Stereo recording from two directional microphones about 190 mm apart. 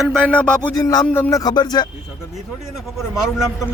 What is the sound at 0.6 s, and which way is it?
Speech, 15° left (ahead or behind).